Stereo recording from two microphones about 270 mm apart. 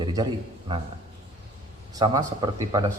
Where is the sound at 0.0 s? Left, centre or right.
Centre.